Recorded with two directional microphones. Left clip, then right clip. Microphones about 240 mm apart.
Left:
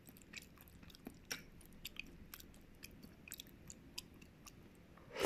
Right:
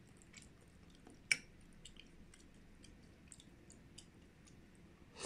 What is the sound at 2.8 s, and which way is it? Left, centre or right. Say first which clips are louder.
Chewing: left 9 dB; left.